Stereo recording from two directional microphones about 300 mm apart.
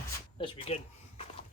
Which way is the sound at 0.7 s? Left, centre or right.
Centre.